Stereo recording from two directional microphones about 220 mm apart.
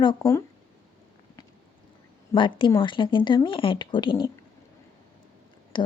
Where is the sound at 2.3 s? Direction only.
20° left (ahead or behind).